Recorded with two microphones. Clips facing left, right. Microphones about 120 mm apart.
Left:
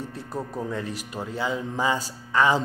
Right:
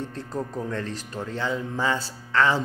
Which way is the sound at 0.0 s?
10° left (ahead or behind).